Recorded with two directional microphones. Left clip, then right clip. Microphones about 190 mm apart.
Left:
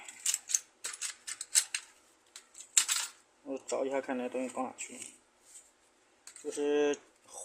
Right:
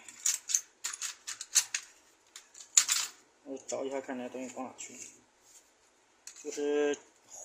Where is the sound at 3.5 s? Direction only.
25° left (ahead or behind).